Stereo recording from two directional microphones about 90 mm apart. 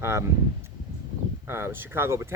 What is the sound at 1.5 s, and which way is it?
Speech, 30° right (ahead or behind).